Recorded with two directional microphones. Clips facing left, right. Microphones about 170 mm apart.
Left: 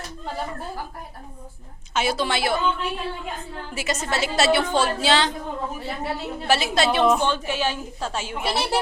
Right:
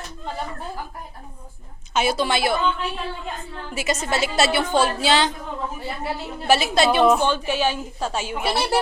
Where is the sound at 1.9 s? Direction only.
15° right (ahead or behind).